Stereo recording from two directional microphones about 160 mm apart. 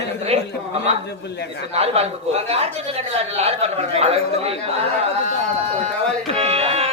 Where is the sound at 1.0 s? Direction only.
90° left.